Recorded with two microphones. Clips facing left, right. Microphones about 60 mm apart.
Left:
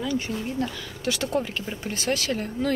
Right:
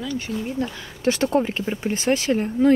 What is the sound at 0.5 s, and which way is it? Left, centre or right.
Speech, right.